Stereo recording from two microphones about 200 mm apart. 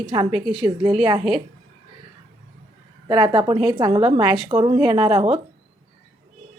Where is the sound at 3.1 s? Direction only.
25° right (ahead or behind).